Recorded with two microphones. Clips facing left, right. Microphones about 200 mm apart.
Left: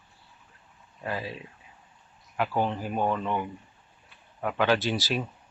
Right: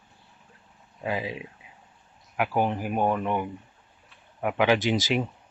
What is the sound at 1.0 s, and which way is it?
A man's voice, 15° right (ahead or behind).